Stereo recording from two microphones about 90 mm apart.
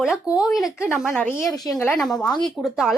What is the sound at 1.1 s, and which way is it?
Speech, 20° left (ahead or behind).